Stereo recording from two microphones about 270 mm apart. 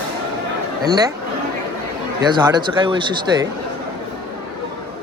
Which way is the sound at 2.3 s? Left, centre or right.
Centre.